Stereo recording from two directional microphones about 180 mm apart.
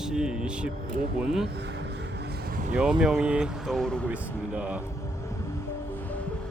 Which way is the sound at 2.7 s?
5° right (ahead or behind).